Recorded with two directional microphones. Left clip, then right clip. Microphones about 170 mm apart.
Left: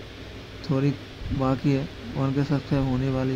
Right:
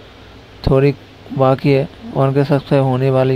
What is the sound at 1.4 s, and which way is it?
Speech, 45° right (ahead or behind).